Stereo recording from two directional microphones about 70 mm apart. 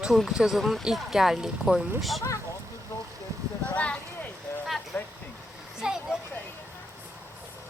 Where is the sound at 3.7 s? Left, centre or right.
Centre.